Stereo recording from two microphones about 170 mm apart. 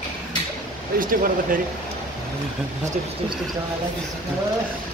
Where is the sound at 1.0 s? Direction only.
55° right (ahead or behind).